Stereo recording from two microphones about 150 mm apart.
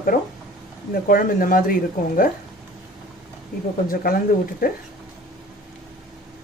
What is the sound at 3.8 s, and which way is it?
Speech, 75° left (ahead or behind).